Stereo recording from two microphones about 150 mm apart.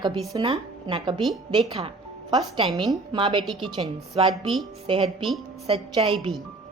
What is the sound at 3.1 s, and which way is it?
A woman's voice, 30° right (ahead or behind).